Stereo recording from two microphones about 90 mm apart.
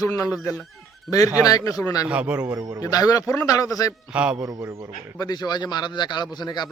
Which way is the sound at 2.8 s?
40° left (ahead or behind).